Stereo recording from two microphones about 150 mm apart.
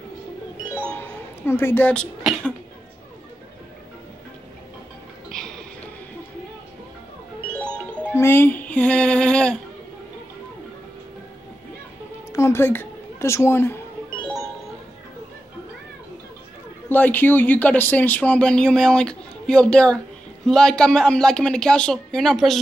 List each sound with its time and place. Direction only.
0.9 s music: 15° left (ahead or behind)
8.0 s music: 15° left (ahead or behind)
12.3 s a sound: 20° left (ahead or behind)
16.9 s speech: 10° left (ahead or behind)